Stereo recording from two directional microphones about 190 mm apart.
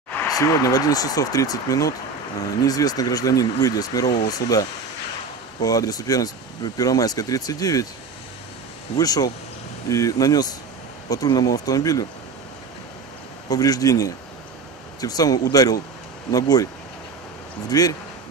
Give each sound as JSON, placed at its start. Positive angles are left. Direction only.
{"t": 0.3, "sound": "speech", "side_deg": 20}
{"t": 8.9, "sound": "speech", "side_deg": 20}
{"t": 13.5, "sound": "speech", "side_deg": 20}
{"t": 17.6, "sound": "speech", "side_deg": 20}